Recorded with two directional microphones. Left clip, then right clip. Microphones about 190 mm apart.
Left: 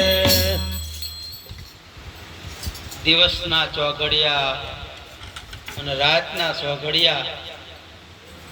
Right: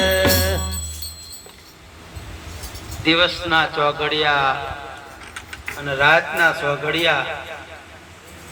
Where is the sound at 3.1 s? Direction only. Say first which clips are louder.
Even; 35° right (ahead or behind).